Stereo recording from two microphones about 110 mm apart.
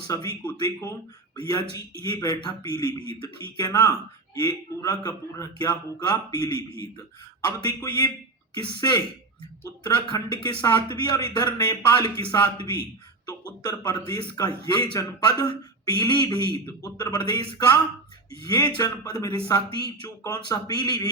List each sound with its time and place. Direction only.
0.1 s speech: 40° left (ahead or behind)
0.6 s speech: 25° left (ahead or behind)
18.4 s speech: 40° left (ahead or behind)